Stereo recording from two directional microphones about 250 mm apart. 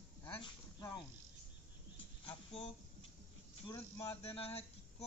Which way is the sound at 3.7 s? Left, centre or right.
Centre.